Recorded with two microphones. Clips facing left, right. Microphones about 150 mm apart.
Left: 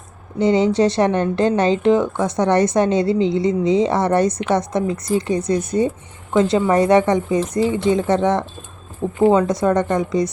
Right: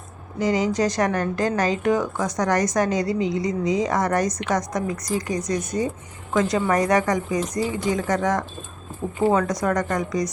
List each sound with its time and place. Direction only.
0.3 s a woman's voice: 30° left (ahead or behind)